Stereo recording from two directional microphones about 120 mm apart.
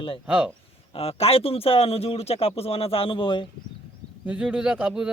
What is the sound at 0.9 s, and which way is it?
A man's voice, 55° left (ahead or behind).